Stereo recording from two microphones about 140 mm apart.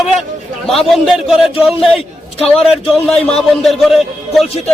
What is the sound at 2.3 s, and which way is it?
Speech, 45° left (ahead or behind).